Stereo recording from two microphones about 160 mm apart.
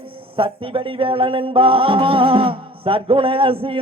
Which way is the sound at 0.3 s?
35° right (ahead or behind).